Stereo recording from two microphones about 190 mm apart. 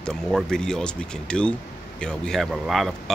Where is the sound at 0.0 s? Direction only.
Centre (ahead or behind).